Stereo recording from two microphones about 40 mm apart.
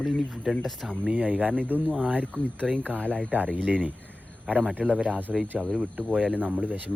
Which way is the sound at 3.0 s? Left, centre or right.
Left.